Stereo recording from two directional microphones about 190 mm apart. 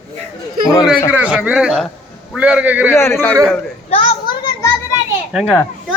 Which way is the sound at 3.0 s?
10° left (ahead or behind).